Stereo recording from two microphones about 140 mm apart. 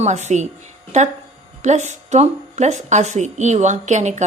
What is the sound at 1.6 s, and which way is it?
A woman's voice, 55° right (ahead or behind).